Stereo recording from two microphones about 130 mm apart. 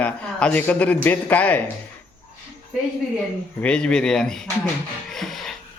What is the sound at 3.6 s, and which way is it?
Speech, 10° left (ahead or behind).